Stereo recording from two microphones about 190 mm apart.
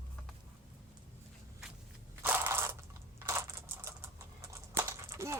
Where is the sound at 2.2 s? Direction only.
10° right (ahead or behind).